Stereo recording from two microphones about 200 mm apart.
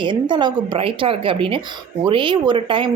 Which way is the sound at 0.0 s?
25° right (ahead or behind).